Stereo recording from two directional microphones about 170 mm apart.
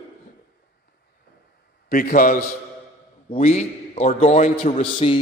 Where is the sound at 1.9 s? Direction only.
55° left (ahead or behind).